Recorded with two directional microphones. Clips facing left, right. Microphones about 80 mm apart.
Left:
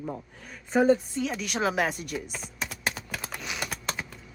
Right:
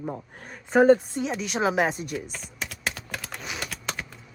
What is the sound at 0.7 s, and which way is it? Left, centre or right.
Speech, right.